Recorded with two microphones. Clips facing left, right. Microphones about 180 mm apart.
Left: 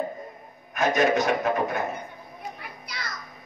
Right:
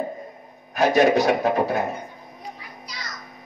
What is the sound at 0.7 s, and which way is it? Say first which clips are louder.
A man's voice: right 5 dB; 35° right (ahead or behind).